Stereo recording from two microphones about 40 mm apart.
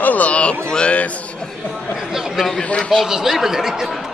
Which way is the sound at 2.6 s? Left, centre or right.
Left.